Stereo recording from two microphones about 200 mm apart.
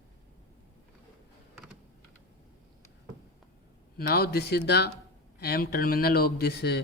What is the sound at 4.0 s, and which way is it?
Speech, 50° left (ahead or behind).